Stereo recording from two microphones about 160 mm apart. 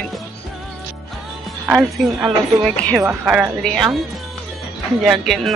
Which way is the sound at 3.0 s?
15° right (ahead or behind).